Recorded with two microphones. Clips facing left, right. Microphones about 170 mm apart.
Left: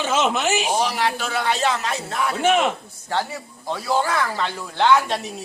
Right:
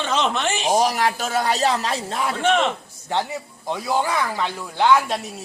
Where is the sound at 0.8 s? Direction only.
45° right (ahead or behind).